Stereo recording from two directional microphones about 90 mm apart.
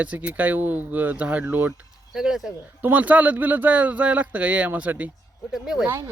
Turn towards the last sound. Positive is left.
turn(degrees=-25)  # may be behind; listen again after turning